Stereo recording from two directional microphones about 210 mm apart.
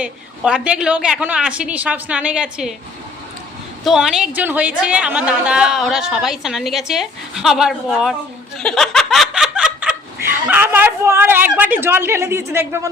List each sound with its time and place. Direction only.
0.0 s a woman's voice: 5° right (ahead or behind)
3.8 s a woman's voice: centre (ahead or behind)
4.4 s snicker: 5° right (ahead or behind)
4.8 s a woman's voice: 5° right (ahead or behind)
8.5 s snicker: centre (ahead or behind)